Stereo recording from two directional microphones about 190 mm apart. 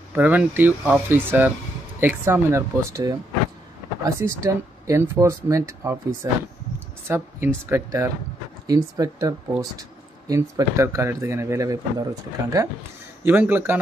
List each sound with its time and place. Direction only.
0.1 s speech: 5° right (ahead or behind)